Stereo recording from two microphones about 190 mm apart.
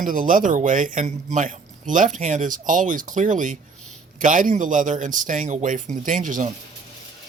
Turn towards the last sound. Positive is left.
turn(degrees=-40)  # may be behind; listen again after turning